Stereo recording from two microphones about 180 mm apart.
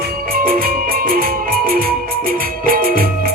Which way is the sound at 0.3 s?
55° right (ahead or behind).